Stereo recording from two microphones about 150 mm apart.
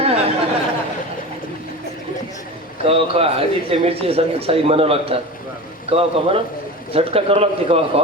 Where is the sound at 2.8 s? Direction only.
40° right (ahead or behind).